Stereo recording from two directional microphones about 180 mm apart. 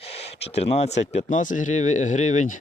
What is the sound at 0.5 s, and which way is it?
Speech, 35° left (ahead or behind).